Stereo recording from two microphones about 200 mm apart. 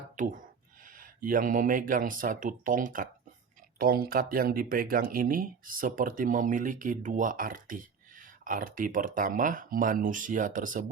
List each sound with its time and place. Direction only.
0.2 s speech: 40° right (ahead or behind)